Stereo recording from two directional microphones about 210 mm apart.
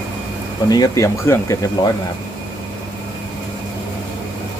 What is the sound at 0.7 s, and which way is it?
Speech, 15° left (ahead or behind).